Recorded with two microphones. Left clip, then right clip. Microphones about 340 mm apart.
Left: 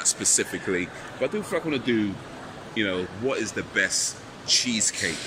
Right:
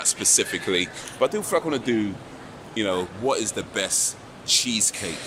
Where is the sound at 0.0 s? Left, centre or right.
Centre.